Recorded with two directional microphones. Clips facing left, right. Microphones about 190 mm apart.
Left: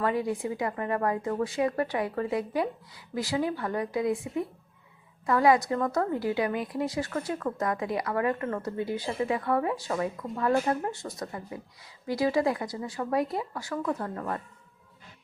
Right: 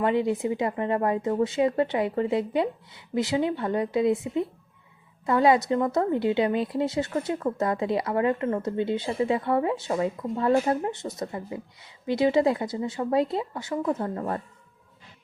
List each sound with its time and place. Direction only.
0.0 s speech: 25° right (ahead or behind)